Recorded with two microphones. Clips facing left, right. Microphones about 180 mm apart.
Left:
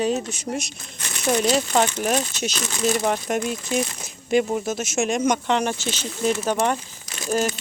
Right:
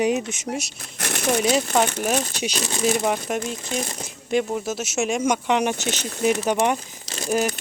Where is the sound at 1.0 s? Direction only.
70° right (ahead or behind).